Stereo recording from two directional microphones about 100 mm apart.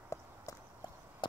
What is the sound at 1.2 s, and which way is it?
Chop, 55° left (ahead or behind).